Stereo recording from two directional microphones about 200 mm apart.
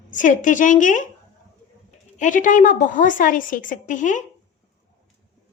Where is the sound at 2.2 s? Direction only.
40° left (ahead or behind).